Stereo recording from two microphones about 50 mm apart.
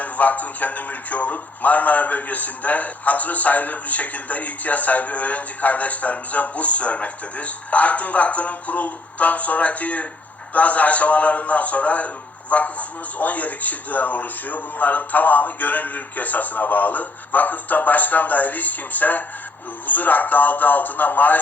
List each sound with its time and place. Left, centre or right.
0.0 s a man's voice: left